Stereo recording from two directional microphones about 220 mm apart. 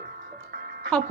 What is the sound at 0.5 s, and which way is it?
Music, 45° right (ahead or behind).